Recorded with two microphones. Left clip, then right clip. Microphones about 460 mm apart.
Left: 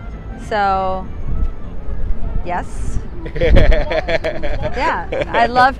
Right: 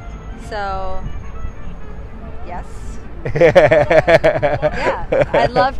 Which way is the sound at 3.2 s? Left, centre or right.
Right.